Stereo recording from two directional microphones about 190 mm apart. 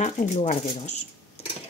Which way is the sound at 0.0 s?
35° left (ahead or behind).